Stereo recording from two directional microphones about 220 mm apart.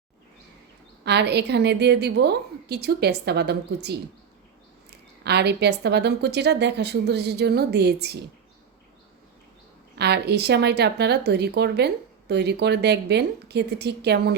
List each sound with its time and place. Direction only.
1.0 s a woman's voice: 50° right (ahead or behind)
5.2 s a woman's voice: 50° right (ahead or behind)
10.0 s a woman's voice: 50° right (ahead or behind)